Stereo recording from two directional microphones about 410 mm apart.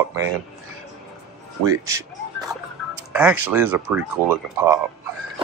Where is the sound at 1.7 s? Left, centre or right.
Centre.